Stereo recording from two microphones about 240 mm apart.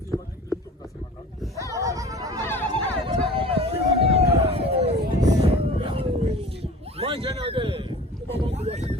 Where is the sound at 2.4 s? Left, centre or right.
Centre.